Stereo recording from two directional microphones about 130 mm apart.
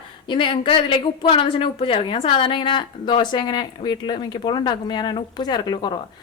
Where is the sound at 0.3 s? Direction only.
40° left (ahead or behind).